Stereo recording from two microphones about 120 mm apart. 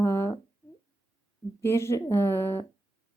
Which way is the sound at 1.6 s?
20° left (ahead or behind).